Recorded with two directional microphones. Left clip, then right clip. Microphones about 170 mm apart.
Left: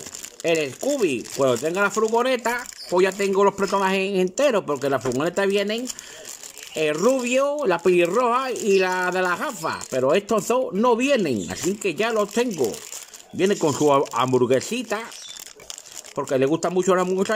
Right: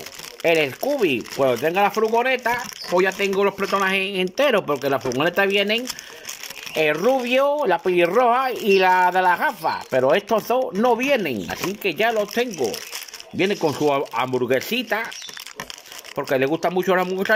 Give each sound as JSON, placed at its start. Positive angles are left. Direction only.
{"t": 0.4, "sound": "speech", "side_deg": 25}
{"t": 16.2, "sound": "speech", "side_deg": 25}